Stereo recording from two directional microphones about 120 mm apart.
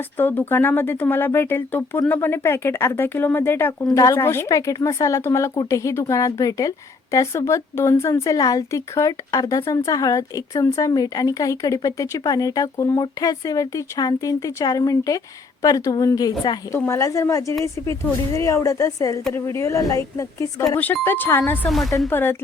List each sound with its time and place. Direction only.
0.2 s a woman's voice: 15° left (ahead or behind)
21.7 s speech: centre (ahead or behind)
21.9 s a woman's voice: 20° left (ahead or behind)